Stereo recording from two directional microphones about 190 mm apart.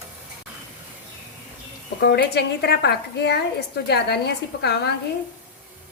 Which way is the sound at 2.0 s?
60° left (ahead or behind).